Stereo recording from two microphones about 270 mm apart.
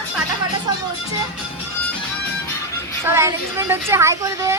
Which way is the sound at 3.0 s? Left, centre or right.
Centre.